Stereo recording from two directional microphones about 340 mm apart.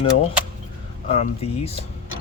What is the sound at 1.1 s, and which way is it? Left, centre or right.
Speech, centre.